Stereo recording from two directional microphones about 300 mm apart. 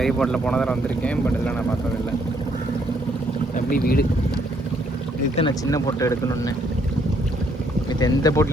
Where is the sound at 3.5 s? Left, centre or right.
Left.